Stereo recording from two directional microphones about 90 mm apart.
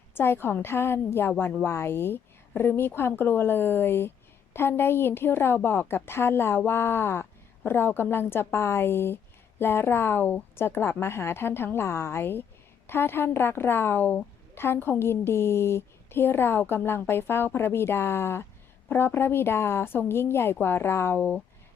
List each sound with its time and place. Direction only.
0.1 s a woman's voice: 25° left (ahead or behind)